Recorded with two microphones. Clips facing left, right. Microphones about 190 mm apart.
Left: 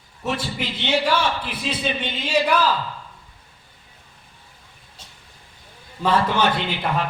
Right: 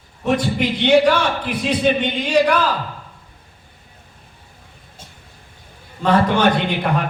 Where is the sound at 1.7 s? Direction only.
55° right (ahead or behind).